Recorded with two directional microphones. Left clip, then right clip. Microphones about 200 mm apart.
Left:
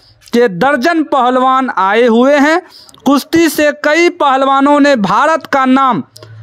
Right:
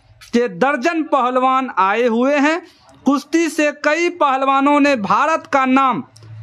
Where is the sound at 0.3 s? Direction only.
35° left (ahead or behind).